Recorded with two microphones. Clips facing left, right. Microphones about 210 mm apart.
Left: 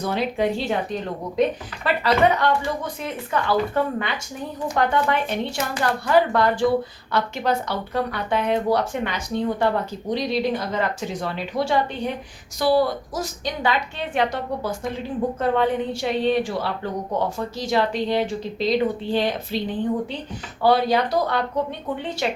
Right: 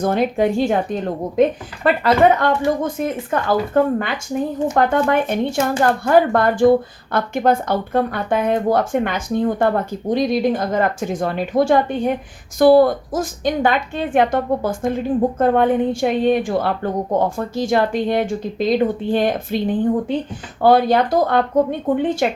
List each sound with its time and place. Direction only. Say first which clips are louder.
0.0 s a woman's voice: right 5 dB; 50° right (ahead or behind)